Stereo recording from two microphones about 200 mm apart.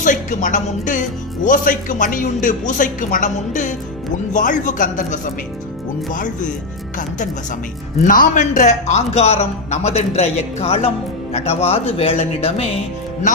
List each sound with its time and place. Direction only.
0.0 s speech: 40° left (ahead or behind)
8.0 s speech: 40° left (ahead or behind)